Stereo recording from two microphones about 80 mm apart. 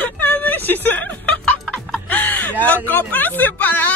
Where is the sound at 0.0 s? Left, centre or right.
Left.